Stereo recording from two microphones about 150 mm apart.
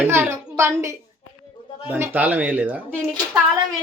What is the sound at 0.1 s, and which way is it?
Speech, 15° right (ahead or behind).